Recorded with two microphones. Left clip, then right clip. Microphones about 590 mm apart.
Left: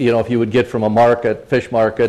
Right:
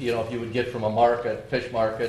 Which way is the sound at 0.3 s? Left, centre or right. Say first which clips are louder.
Left 12 dB; left.